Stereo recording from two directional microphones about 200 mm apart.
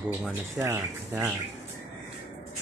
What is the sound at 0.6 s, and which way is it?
Speech, 15° right (ahead or behind).